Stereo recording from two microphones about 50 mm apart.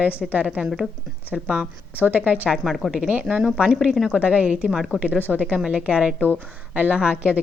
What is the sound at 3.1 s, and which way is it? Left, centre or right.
Speech, right.